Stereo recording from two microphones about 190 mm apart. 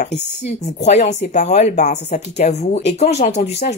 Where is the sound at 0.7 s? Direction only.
35° left (ahead or behind).